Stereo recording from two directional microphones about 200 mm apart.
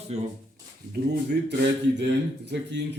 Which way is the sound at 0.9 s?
60° right (ahead or behind).